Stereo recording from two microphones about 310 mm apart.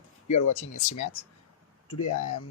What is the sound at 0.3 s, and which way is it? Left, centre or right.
Speech, left.